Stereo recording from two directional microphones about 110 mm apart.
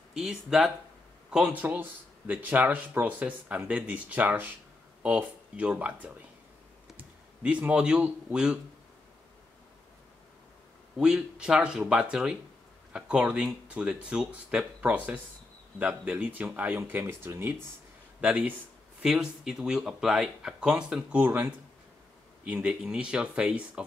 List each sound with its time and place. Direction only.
0.1 s speech: 5° right (ahead or behind)
11.0 s speech: 10° right (ahead or behind)